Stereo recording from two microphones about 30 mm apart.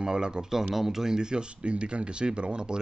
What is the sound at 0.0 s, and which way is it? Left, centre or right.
Speech, right.